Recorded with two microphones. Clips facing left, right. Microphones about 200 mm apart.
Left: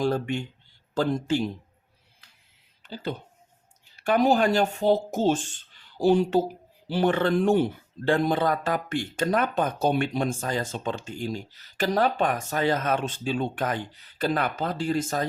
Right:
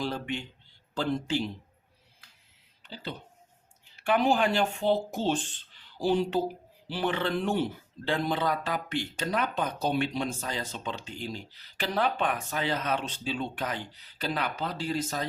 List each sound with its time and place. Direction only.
0.0 s speech: 45° left (ahead or behind)
2.8 s speech: 45° left (ahead or behind)